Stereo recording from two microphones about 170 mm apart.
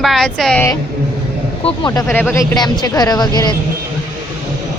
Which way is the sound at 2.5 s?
25° left (ahead or behind).